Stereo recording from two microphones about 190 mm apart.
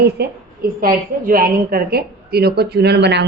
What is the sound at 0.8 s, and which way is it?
A woman's voice, 50° right (ahead or behind).